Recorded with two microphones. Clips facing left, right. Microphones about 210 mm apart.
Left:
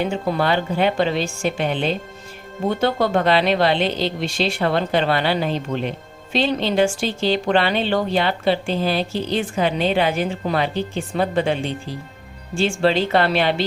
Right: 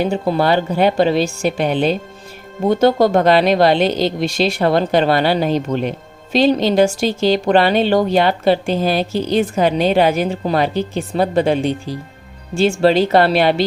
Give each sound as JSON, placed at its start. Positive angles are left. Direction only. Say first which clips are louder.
{"t": 0.0, "sound": "speech", "louder": "right 4 dB", "side_deg": -35}